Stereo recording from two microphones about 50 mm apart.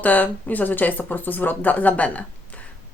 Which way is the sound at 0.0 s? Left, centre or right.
Left.